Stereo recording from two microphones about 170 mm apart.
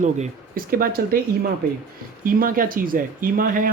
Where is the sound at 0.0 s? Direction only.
50° right (ahead or behind).